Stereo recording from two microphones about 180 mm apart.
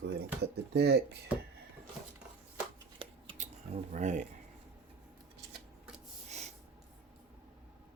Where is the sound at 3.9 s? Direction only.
40° right (ahead or behind).